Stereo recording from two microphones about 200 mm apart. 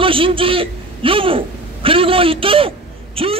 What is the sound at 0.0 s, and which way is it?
A man's voice, 25° right (ahead or behind).